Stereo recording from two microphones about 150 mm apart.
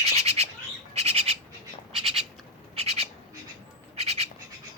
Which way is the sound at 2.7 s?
45° right (ahead or behind).